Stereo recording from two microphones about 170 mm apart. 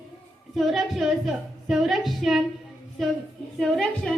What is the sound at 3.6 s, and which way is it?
Speech, 5° left (ahead or behind).